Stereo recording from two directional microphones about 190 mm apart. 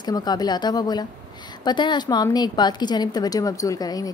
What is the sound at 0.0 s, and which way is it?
A woman's voice, 20° left (ahead or behind).